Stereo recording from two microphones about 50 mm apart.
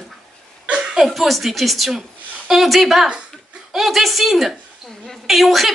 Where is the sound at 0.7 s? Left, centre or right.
Centre.